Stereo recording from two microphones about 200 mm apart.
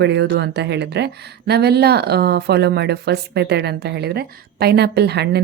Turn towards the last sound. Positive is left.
turn(degrees=-55)  # may be behind; listen again after turning